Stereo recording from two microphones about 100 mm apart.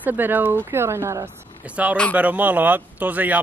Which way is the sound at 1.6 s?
15° right (ahead or behind).